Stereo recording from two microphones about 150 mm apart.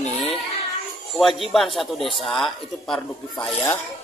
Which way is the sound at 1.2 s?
Centre (ahead or behind).